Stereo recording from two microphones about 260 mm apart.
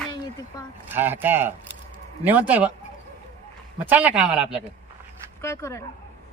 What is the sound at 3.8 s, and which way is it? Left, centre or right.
Speech, centre.